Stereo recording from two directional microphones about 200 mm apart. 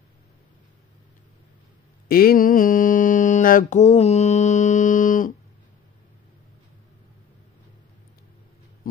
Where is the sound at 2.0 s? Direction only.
50° left (ahead or behind).